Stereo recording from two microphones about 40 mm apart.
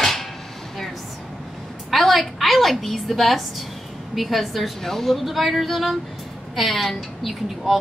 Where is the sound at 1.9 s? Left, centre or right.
Centre.